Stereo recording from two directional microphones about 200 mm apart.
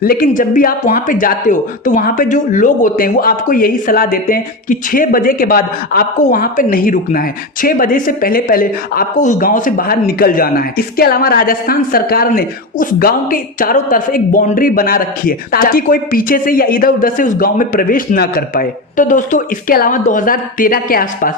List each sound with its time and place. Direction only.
0.0 s speech: 45° left (ahead or behind)